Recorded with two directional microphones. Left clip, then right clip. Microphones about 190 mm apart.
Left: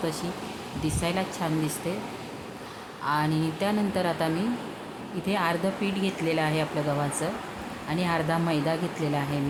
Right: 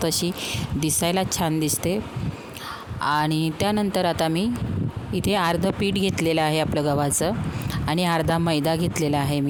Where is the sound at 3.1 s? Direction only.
60° right (ahead or behind).